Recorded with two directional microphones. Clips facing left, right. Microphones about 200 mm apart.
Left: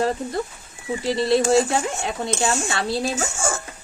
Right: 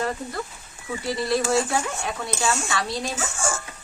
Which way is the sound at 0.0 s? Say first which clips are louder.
Left 5 dB; 25° left (ahead or behind).